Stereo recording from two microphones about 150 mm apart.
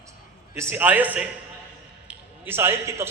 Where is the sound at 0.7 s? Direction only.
10° right (ahead or behind).